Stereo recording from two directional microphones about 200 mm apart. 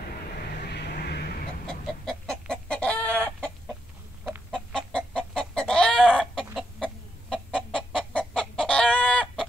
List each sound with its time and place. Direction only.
0.4 s vehicle: 55° left (ahead or behind)
1.7 s chicken: 5° left (ahead or behind)